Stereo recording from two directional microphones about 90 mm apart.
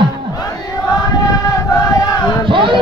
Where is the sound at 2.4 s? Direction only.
70° right (ahead or behind).